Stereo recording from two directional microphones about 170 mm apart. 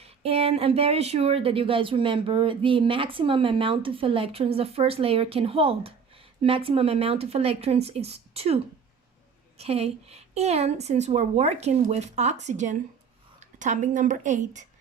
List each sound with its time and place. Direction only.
0.0 s a woman's voice: 35° right (ahead or behind)